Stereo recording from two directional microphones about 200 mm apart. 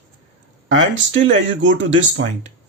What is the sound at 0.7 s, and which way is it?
Speech, 70° right (ahead or behind).